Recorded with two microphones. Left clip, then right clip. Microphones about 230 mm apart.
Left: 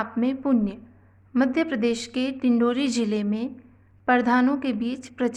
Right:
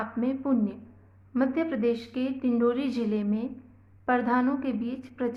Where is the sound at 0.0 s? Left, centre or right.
Left.